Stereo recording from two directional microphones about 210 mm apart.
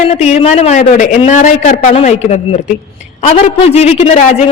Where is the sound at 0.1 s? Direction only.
30° left (ahead or behind).